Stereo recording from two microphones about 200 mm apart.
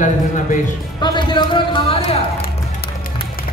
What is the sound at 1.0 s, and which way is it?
Speech, 25° left (ahead or behind).